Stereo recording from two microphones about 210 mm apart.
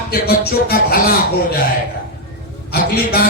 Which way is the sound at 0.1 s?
45° left (ahead or behind).